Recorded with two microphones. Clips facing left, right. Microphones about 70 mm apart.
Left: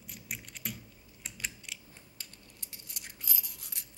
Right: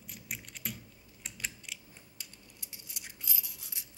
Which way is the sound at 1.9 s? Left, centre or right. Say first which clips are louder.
Left 1 dB; centre.